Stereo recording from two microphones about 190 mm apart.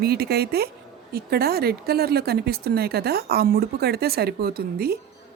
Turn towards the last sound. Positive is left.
turn(degrees=-55)  # may be behind; listen again after turning